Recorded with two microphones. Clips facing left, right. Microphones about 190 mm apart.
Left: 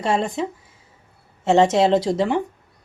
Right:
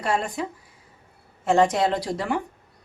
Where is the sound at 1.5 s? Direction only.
25° left (ahead or behind).